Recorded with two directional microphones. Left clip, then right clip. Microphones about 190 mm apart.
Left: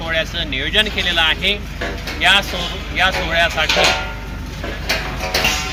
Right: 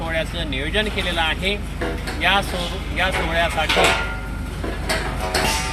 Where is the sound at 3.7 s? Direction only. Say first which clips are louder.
Even; 50° left (ahead or behind).